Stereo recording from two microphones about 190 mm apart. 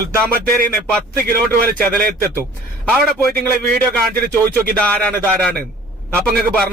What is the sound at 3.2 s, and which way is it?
Speech, 10° left (ahead or behind).